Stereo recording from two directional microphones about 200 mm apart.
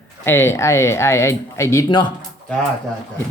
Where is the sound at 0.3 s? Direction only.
10° left (ahead or behind).